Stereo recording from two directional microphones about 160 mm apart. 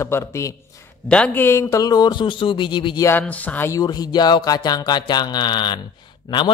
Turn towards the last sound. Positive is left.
turn(degrees=30)  # may be behind; listen again after turning